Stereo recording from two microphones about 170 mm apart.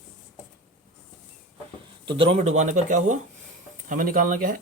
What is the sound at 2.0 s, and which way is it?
Speech, 30° right (ahead or behind).